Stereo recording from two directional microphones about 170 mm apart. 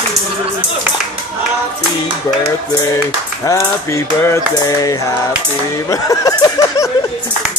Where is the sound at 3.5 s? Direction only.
15° left (ahead or behind).